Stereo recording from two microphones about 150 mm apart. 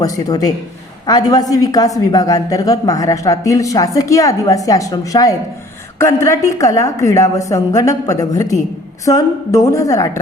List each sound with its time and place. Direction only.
0.0 s a woman's voice: 25° left (ahead or behind)